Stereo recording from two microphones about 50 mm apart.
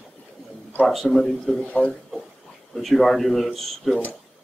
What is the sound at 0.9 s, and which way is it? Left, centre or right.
Speech, centre.